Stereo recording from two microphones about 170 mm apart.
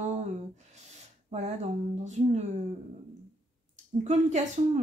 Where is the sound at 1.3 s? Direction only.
40° right (ahead or behind).